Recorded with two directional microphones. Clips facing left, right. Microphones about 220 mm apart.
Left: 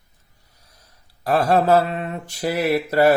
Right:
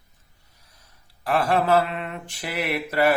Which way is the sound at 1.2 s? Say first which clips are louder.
Left 4 dB; 40° left (ahead or behind).